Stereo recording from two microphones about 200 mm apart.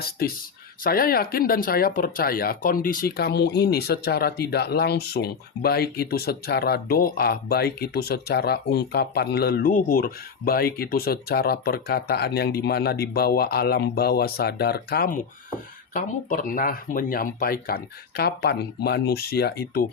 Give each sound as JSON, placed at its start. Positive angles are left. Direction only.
{"t": 0.2, "sound": "speech", "side_deg": 50}